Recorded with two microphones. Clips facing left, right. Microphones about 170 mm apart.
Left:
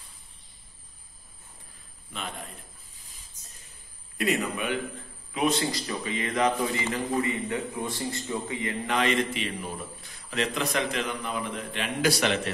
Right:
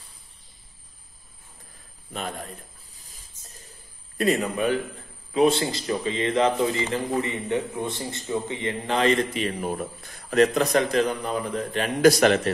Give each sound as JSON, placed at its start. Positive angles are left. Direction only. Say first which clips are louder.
{"t": 2.1, "sound": "a man's voice", "louder": "right 5 dB", "side_deg": -40}
{"t": 4.2, "sound": "a man's voice", "louder": "right 5 dB", "side_deg": -35}